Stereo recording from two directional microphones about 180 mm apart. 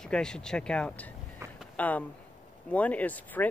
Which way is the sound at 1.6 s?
10° left (ahead or behind).